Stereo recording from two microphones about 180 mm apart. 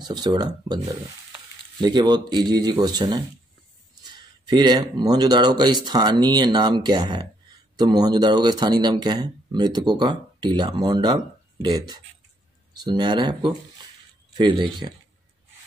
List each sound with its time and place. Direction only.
0.0 s speech: 25° right (ahead or behind)